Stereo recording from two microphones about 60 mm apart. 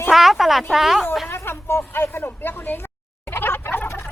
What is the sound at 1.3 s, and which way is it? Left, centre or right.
Speech, left.